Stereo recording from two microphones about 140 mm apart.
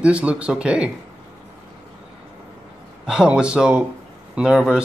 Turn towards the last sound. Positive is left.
turn(degrees=-5)  # may be behind; listen again after turning